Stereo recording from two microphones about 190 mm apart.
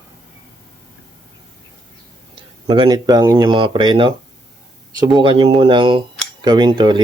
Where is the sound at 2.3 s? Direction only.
25° right (ahead or behind).